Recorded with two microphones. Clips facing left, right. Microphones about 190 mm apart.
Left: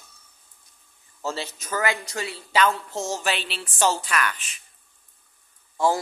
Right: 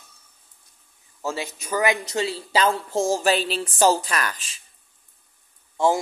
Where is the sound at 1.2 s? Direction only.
15° right (ahead or behind); by 4.5 s 35° right (ahead or behind).